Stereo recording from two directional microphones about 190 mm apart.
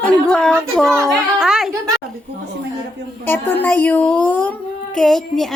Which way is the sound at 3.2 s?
10° left (ahead or behind).